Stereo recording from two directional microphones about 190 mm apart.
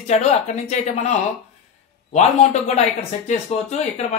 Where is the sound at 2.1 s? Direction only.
35° left (ahead or behind).